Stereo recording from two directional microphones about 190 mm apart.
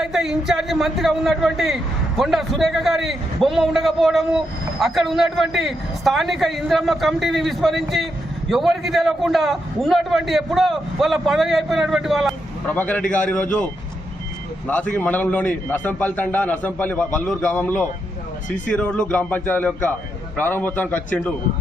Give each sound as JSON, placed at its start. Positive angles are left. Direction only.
{"t": 0.0, "sound": "a man's voice", "side_deg": 0}
{"t": 14.7, "sound": "a man's voice", "side_deg": 10}
{"t": 18.4, "sound": "speech", "side_deg": 40}
{"t": 18.7, "sound": "a man's voice", "side_deg": 5}